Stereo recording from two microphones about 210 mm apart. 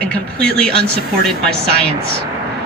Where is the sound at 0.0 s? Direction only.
5° left (ahead or behind).